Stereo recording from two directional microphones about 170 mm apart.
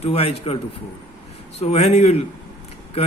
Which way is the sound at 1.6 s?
35° left (ahead or behind).